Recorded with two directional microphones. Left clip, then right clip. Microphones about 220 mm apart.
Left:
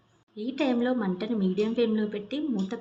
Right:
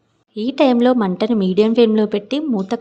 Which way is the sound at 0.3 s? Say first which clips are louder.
Right 13 dB; 55° right (ahead or behind).